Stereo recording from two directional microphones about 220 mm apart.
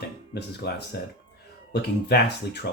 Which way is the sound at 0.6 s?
50° left (ahead or behind).